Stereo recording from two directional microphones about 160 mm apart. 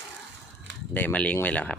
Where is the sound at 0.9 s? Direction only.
10° left (ahead or behind).